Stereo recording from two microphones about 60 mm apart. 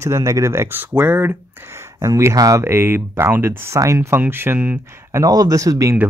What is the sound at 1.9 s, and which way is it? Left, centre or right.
Speech, right.